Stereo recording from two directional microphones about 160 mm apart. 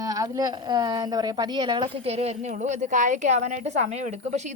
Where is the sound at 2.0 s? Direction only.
40° right (ahead or behind).